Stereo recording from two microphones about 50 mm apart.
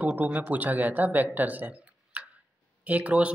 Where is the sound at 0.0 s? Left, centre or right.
Right.